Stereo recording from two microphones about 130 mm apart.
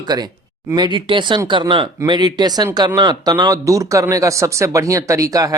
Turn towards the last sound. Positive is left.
turn(degrees=-25)  # may be behind; listen again after turning